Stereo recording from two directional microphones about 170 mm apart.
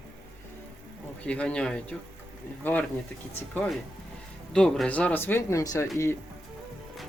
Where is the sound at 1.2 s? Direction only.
5° left (ahead or behind).